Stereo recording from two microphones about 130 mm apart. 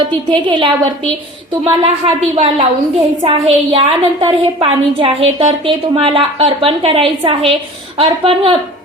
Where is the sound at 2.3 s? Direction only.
45° right (ahead or behind).